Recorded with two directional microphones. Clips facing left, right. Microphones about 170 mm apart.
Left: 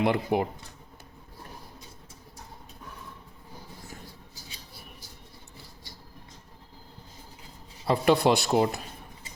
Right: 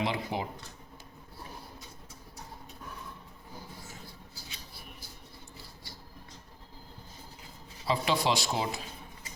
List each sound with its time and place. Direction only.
0.0 s speech: 55° left (ahead or behind)
7.9 s speech: 55° left (ahead or behind)